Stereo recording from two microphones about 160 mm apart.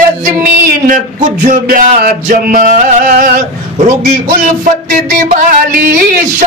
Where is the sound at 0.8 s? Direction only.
55° right (ahead or behind).